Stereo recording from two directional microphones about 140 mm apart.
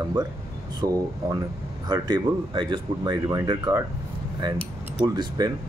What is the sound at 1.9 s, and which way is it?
Speech, 30° right (ahead or behind).